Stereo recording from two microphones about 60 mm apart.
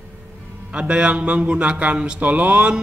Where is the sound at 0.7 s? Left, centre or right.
Centre.